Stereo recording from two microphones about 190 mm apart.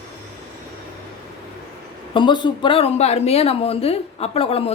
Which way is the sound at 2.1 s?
25° left (ahead or behind).